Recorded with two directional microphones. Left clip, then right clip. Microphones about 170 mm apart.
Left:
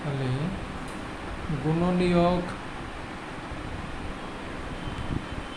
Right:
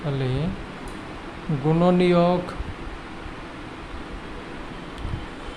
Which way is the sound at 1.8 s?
35° right (ahead or behind).